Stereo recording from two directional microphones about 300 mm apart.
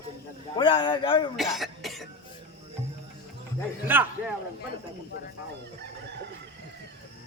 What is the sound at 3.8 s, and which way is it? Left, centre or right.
Speech, centre.